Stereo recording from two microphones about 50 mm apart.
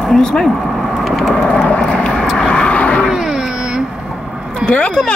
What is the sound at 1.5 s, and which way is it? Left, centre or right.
Vehicle, left.